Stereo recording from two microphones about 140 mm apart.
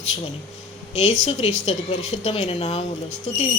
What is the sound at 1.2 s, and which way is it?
A woman's voice, 50° left (ahead or behind).